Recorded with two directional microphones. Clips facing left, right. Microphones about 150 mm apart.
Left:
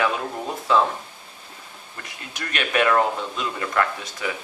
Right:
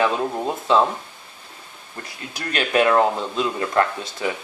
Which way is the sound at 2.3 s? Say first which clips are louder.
Right 3 dB; 30° right (ahead or behind).